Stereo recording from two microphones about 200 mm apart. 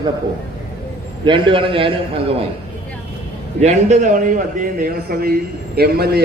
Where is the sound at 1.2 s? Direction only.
25° right (ahead or behind).